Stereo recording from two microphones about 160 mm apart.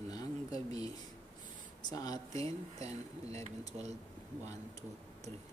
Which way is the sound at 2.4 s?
40° right (ahead or behind).